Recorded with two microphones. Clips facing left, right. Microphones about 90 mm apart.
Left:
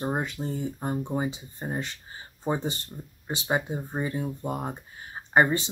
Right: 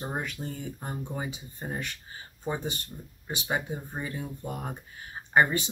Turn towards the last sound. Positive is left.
turn(degrees=25)  # may be behind; listen again after turning